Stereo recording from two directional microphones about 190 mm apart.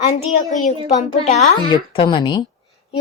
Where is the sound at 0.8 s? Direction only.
35° left (ahead or behind).